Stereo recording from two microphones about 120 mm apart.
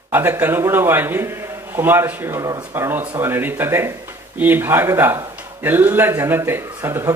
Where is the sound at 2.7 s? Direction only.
20° right (ahead or behind).